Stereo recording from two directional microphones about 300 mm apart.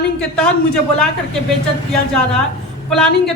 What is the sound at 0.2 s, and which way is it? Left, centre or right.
Speech, centre.